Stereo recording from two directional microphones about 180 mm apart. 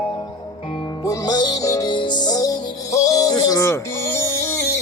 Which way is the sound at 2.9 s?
20° left (ahead or behind).